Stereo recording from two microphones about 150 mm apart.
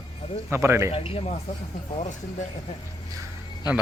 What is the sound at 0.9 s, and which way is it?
Speech, 40° left (ahead or behind).